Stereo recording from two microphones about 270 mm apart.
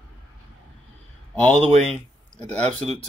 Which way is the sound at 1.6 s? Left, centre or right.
Right.